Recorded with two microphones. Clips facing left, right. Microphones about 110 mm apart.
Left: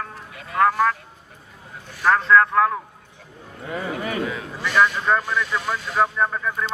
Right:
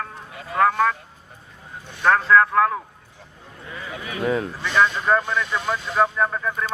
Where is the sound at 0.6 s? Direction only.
5° left (ahead or behind).